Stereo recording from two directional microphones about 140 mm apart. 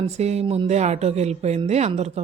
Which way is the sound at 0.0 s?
50° right (ahead or behind).